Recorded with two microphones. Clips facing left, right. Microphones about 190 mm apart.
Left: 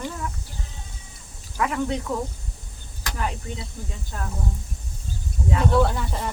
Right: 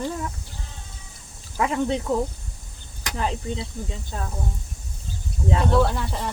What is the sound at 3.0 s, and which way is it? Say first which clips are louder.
Speech: right 2 dB; 20° right (ahead or behind).